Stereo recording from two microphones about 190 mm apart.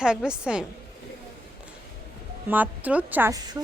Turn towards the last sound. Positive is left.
turn(degrees=-15)  # may be behind; listen again after turning